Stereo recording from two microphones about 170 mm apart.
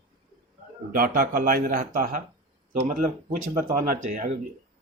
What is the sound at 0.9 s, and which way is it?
Speech, 55° right (ahead or behind).